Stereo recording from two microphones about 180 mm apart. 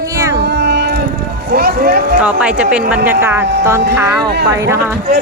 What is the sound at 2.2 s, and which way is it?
Speech, 5° right (ahead or behind).